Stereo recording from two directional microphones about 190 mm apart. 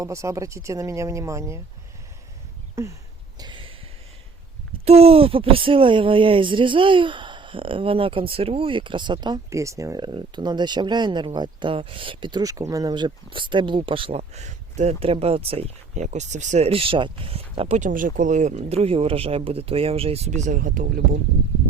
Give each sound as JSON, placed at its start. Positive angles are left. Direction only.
{"t": 0.0, "sound": "speech", "side_deg": -15}
{"t": 2.8, "sound": "speech", "side_deg": -15}
{"t": 3.3, "sound": "a sound", "side_deg": -25}
{"t": 4.9, "sound": "speech", "side_deg": -30}